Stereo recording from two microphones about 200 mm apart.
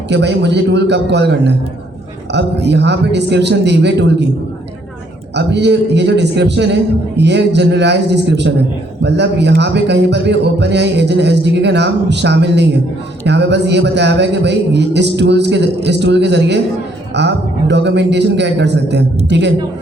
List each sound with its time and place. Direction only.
0.1 s a man's voice: 60° right (ahead or behind)
5.3 s a man's voice: 60° right (ahead or behind)